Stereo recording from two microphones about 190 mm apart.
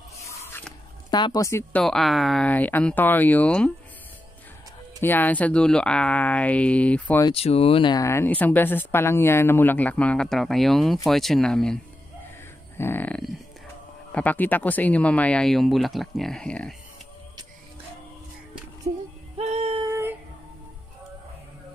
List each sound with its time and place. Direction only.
0.5 s a sound: 10° left (ahead or behind)
1.1 s speech: 20° left (ahead or behind)
5.0 s speech: 10° left (ahead or behind)
7.2 s speech: 30° left (ahead or behind); by 16.7 s 5° left (ahead or behind)
19.3 s music: 35° right (ahead or behind)
19.9 s a sound: 15° right (ahead or behind)